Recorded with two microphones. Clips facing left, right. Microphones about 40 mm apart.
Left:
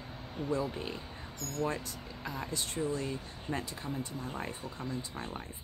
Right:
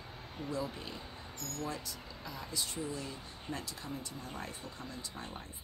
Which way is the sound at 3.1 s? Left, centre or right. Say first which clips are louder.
Left 5 dB; left.